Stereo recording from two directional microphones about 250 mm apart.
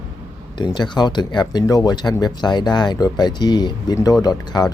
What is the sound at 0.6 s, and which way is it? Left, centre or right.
Speech, centre.